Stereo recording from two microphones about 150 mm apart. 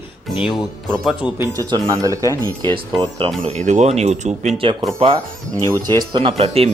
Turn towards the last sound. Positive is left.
turn(degrees=-40)  # may be behind; listen again after turning